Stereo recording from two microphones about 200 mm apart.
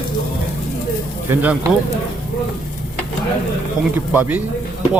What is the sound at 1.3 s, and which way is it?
Speech, 10° right (ahead or behind).